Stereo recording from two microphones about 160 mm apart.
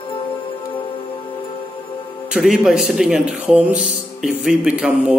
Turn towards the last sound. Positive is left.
turn(degrees=-5)  # may be behind; listen again after turning